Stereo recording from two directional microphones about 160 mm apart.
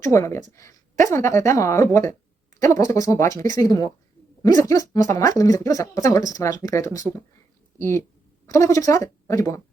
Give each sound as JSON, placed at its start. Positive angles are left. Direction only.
{"t": 0.1, "sound": "speech", "side_deg": 20}